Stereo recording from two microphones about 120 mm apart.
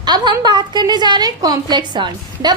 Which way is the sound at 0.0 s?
35° right (ahead or behind).